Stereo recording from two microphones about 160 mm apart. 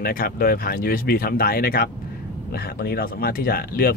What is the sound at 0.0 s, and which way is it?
Speech, 65° left (ahead or behind).